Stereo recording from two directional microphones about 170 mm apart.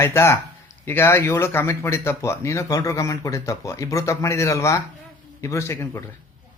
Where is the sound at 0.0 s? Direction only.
15° left (ahead or behind).